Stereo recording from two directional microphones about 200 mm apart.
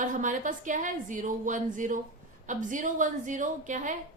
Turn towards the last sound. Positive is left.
turn(degrees=-40)  # may be behind; listen again after turning